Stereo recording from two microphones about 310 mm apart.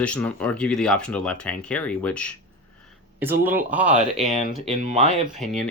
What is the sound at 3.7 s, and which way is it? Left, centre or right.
Speech, centre.